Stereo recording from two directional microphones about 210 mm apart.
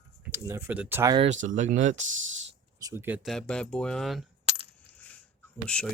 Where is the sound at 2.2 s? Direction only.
65° right (ahead or behind).